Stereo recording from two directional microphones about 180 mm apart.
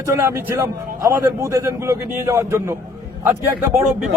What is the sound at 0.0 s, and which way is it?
A man's voice, 15° right (ahead or behind).